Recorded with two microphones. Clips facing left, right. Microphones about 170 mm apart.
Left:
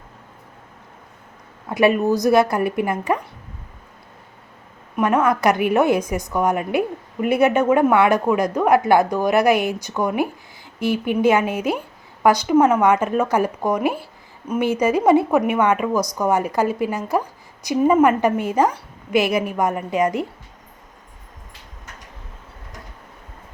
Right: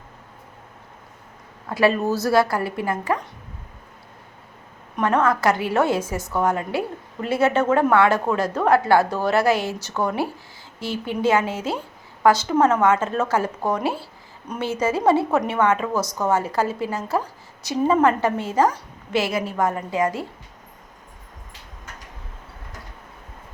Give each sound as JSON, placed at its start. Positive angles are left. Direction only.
{"t": 1.7, "sound": "a woman's voice", "side_deg": 20}
{"t": 4.9, "sound": "a woman's voice", "side_deg": 10}